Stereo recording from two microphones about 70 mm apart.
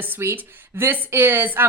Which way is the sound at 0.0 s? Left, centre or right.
Right.